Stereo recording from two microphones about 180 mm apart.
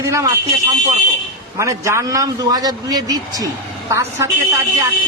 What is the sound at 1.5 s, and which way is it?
A man's voice, 15° right (ahead or behind).